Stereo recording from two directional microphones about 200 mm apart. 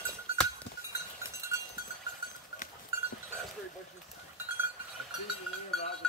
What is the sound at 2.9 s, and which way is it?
Goat, 15° right (ahead or behind).